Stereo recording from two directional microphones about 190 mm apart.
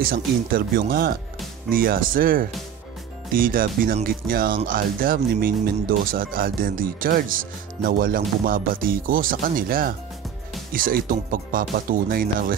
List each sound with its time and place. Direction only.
0.0 s speech: 50° right (ahead or behind)